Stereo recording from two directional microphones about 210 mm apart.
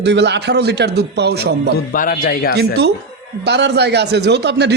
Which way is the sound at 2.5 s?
50° right (ahead or behind).